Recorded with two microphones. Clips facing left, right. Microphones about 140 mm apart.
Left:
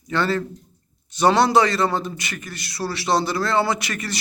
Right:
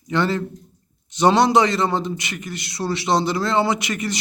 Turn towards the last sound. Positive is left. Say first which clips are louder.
# right 3 dB
turn(degrees=-20)  # may be behind; listen again after turning